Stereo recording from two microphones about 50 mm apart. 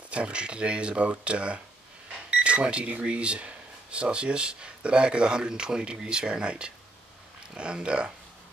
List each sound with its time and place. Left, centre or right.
0.1 s speech: right